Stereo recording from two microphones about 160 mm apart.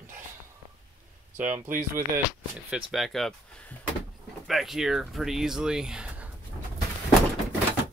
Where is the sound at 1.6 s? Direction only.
55° right (ahead or behind).